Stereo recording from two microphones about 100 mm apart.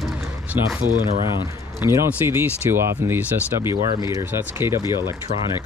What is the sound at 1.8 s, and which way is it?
Speech, 25° right (ahead or behind).